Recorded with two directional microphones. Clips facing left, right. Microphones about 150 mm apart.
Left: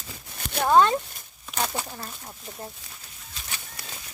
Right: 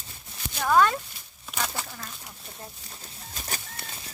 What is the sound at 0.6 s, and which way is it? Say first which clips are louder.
Speech: left 2 dB; 25° left (ahead or behind).